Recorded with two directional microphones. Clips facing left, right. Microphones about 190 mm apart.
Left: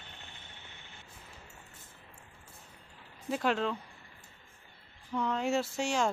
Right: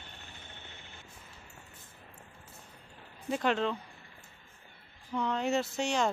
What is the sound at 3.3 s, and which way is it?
Speech, 5° left (ahead or behind).